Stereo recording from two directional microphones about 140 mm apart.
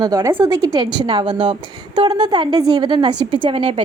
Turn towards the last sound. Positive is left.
turn(degrees=-40)  # may be behind; listen again after turning